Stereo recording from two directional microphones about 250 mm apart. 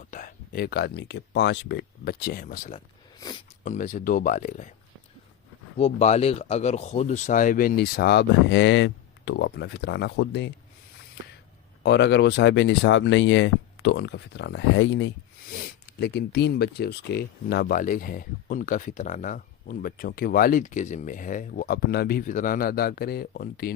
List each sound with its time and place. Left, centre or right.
0.0 s speech: left
3.2 s speech: centre
3.6 s speech: left
5.7 s speech: left
11.8 s speech: left